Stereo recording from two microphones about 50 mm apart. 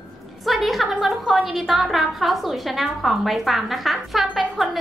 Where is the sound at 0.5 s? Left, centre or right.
Centre.